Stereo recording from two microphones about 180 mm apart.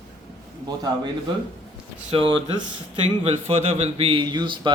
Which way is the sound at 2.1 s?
30° right (ahead or behind).